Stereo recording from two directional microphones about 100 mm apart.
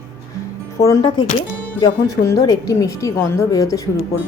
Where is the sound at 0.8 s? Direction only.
30° left (ahead or behind).